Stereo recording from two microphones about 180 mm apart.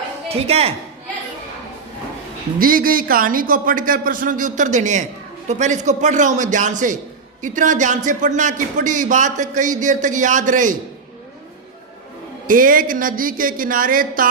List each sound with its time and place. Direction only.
0.3 s speech: 35° right (ahead or behind)
2.6 s speech: 50° right (ahead or behind)
12.5 s speech: 50° right (ahead or behind)